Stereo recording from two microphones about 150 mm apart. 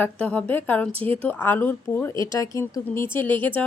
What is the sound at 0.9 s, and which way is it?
Speech, 40° right (ahead or behind).